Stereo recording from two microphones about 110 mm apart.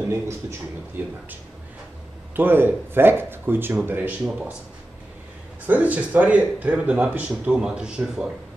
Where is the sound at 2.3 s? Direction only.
20° right (ahead or behind).